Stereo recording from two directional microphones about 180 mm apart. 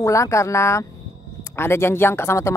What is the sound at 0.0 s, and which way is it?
Speech, 15° left (ahead or behind).